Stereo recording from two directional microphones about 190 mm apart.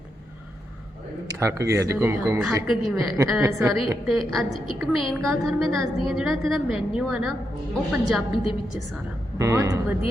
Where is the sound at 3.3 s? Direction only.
15° right (ahead or behind).